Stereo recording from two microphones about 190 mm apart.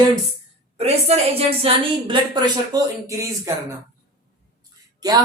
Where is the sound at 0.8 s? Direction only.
35° right (ahead or behind); by 3.5 s 15° right (ahead or behind).